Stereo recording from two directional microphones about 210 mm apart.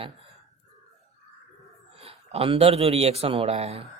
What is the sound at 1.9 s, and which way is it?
Speech, 30° right (ahead or behind).